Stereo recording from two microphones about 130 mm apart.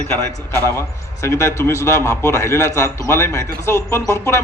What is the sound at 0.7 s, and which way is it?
A man's voice, 20° left (ahead or behind).